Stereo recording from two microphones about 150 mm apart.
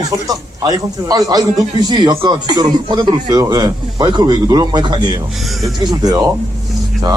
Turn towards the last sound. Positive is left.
turn(degrees=-25)  # may be behind; listen again after turning